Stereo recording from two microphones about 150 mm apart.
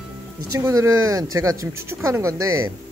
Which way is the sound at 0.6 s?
20° right (ahead or behind).